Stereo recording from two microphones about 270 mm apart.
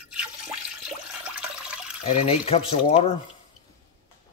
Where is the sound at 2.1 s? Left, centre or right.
Left.